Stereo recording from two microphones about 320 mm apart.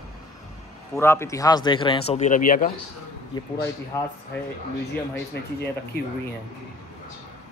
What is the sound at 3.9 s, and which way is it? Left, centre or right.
Speech, centre.